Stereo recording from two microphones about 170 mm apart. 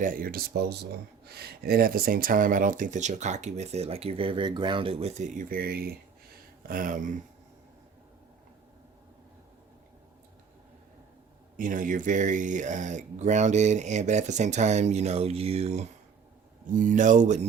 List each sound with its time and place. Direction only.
0.0 s speech: 55° right (ahead or behind)
11.5 s speech: 50° right (ahead or behind)
16.7 s speech: 50° right (ahead or behind)